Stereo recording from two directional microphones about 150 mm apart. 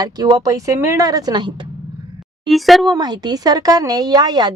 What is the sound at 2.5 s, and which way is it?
Speech, centre (ahead or behind).